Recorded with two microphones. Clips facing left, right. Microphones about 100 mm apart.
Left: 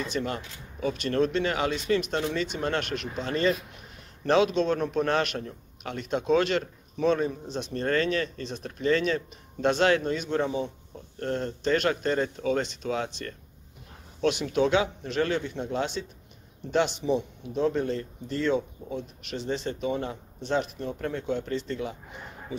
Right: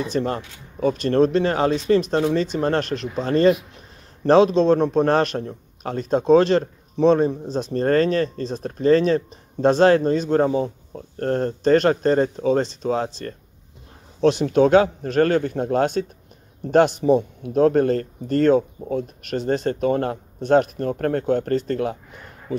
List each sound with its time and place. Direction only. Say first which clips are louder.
0.0 s a man's voice: right 7 dB; 35° right (ahead or behind); by 21.9 s 55° right (ahead or behind)